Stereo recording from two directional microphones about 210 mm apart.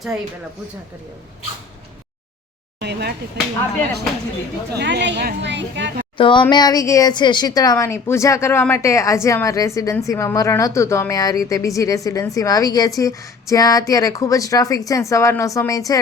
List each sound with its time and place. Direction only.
2.8 s speech: 50° right (ahead or behind)
4.8 s a woman's voice: 55° right (ahead or behind)
6.1 s a woman's voice: 25° left (ahead or behind)